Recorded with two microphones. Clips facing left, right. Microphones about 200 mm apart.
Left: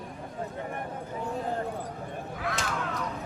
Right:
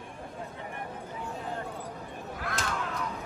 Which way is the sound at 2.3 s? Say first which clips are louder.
Left 1 dB; centre (ahead or behind).